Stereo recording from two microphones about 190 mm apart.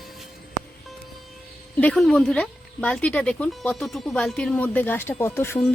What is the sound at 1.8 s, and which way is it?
Speech, 5° left (ahead or behind).